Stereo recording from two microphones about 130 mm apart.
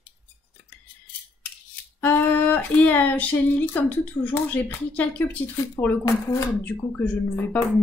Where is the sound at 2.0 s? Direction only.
15° left (ahead or behind).